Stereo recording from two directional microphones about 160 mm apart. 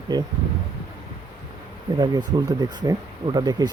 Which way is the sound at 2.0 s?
25° right (ahead or behind).